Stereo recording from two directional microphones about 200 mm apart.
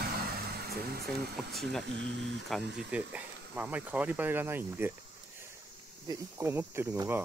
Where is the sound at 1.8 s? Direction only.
65° right (ahead or behind).